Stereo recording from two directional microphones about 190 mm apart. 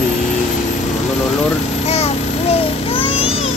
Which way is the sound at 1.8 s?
35° left (ahead or behind).